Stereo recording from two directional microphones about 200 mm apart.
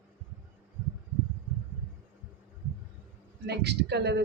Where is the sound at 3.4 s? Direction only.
55° right (ahead or behind).